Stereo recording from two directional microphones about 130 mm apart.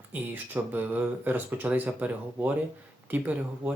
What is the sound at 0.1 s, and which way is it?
Speech, 15° right (ahead or behind).